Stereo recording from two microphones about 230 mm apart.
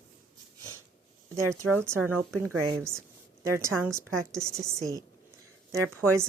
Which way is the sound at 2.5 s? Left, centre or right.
Right.